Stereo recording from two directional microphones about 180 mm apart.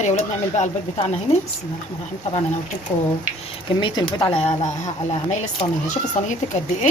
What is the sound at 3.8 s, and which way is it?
Speech, 30° left (ahead or behind).